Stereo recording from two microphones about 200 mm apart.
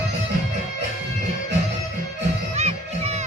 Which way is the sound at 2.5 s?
35° right (ahead or behind).